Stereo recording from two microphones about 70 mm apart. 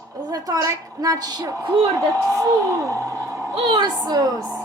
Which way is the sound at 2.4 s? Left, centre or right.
Right.